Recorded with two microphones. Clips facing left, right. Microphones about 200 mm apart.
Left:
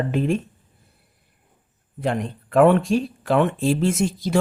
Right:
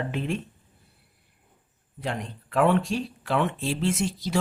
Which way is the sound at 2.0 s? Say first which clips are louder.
Left 8 dB; 50° left (ahead or behind).